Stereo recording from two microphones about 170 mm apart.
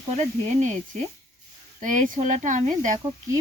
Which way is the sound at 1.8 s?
45° right (ahead or behind).